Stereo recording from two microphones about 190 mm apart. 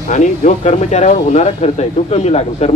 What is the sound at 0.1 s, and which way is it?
A man's voice, 40° left (ahead or behind).